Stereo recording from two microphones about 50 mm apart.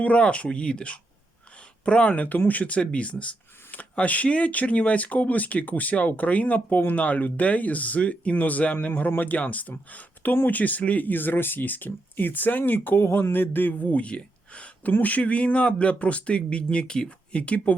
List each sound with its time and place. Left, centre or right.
0.0 s speech: left